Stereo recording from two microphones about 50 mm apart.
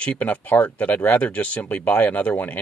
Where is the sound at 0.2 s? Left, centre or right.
Left.